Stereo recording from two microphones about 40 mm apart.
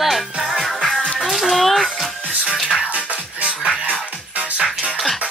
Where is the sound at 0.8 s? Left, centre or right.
Left.